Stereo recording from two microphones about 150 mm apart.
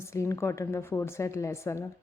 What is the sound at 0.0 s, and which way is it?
A woman's voice, 20° left (ahead or behind).